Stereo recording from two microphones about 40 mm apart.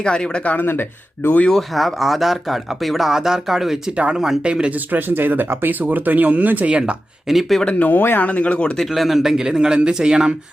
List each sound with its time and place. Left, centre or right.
0.0 s speech: left
0.6 s speech: left
1.5 s speech: centre
3.9 s speech: right
4.7 s speech: right
7.3 s speech: centre
7.8 s speech: left
8.3 s speech: left
8.9 s a man's voice: centre